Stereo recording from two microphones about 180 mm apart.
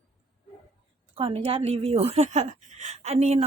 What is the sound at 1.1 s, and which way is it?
Speech, 30° right (ahead or behind).